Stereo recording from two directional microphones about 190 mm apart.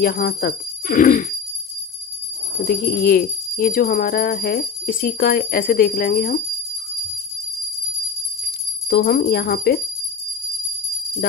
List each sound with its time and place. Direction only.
0.0 s speech: 50° left (ahead or behind)
2.6 s speech: 50° left (ahead or behind)
8.9 s speech: 50° left (ahead or behind)